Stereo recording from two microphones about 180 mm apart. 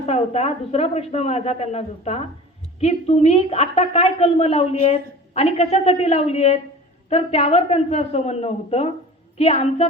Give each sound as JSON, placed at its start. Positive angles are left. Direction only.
{"t": 0.0, "sound": "a woman's voice", "side_deg": 35}